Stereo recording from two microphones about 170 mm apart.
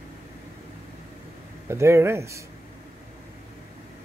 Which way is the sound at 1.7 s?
15° right (ahead or behind).